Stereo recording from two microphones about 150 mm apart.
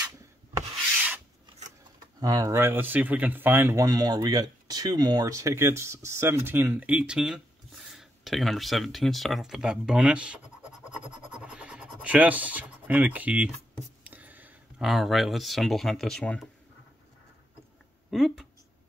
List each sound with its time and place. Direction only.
2.1 s speech: 25° right (ahead or behind); by 10.4 s 5° right (ahead or behind)
11.1 s scratch: 5° right (ahead or behind)
14.0 s speech: 10° right (ahead or behind)
18.1 s speech: centre (ahead or behind)